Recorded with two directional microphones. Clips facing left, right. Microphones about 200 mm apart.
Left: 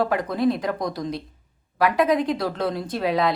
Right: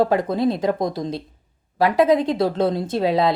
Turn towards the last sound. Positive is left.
turn(degrees=-25)  # may be behind; listen again after turning